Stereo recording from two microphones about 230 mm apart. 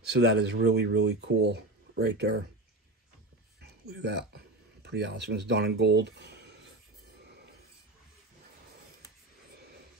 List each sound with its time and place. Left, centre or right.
0.1 s speech: right
3.6 s speech: right
7.2 s a sound: right